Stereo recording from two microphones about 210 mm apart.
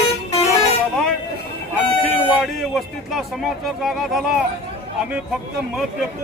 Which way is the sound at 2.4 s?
Centre (ahead or behind).